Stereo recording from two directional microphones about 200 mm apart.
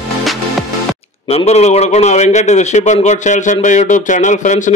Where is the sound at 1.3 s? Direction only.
35° left (ahead or behind).